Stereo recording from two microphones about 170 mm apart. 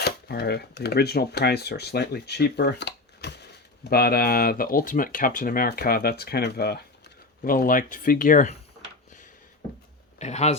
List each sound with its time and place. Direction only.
0.0 s speech: 70° left (ahead or behind)
3.8 s speech: 65° left (ahead or behind)
7.4 s speech: 55° left (ahead or behind)
10.2 s speech: 40° left (ahead or behind)